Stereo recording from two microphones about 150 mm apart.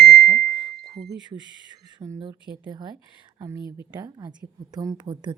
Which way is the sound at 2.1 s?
30° right (ahead or behind).